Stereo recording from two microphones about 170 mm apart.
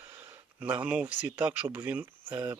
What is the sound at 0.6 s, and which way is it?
Speech, 10° right (ahead or behind).